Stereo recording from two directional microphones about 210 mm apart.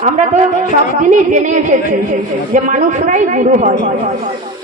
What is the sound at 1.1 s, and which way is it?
A woman's voice, 35° right (ahead or behind).